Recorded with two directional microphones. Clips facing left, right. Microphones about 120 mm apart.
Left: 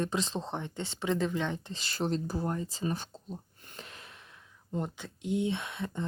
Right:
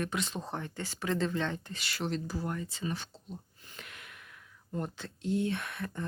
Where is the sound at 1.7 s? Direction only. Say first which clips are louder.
Left 3 dB; 35° left (ahead or behind).